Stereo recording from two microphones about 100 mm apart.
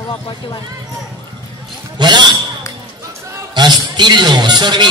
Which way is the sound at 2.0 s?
50° right (ahead or behind).